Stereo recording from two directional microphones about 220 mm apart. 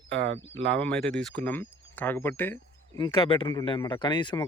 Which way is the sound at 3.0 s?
25° left (ahead or behind).